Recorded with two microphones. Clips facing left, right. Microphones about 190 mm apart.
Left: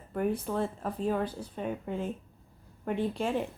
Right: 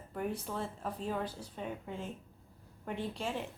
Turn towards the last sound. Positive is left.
turn(degrees=55)  # may be behind; listen again after turning